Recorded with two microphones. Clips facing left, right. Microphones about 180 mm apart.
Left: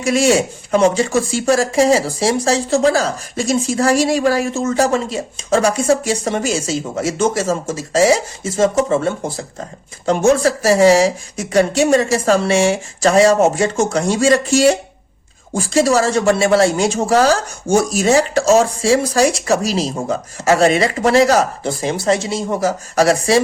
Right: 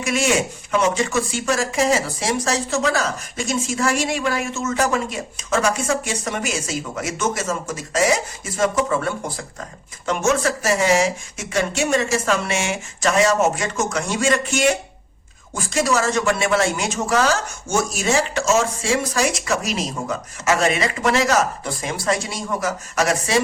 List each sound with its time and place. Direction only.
0.0 s speech: 35° left (ahead or behind)